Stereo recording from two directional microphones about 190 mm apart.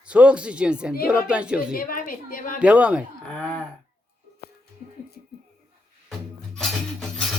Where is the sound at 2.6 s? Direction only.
5° right (ahead or behind).